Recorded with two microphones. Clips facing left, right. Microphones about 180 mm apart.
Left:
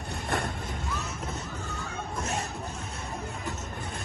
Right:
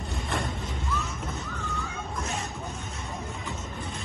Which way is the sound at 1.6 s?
35° left (ahead or behind).